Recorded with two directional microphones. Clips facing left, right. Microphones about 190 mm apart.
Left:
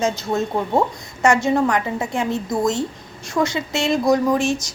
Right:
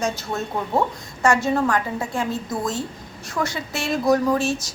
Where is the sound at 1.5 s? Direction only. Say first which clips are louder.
Left 2 dB; 20° left (ahead or behind).